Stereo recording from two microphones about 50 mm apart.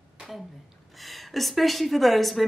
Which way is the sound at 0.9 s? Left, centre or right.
Centre.